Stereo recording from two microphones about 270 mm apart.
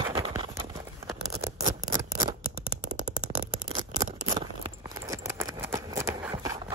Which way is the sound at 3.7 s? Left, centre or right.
Centre.